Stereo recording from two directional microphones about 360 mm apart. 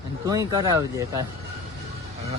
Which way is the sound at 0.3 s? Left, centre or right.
Centre.